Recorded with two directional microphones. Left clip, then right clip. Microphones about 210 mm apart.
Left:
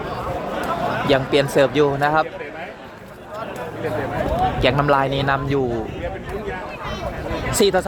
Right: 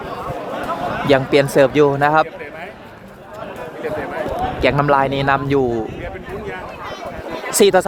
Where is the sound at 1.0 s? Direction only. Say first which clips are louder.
Right 5 dB; 15° right (ahead or behind).